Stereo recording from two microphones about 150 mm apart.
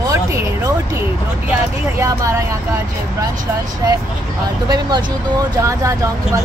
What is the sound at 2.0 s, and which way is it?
Speech, 20° right (ahead or behind).